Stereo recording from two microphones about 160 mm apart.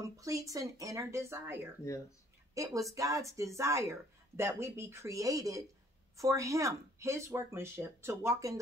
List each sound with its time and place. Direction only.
0.0 s speech: 20° right (ahead or behind)